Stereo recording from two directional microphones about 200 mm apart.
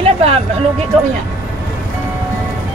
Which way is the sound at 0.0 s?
30° right (ahead or behind).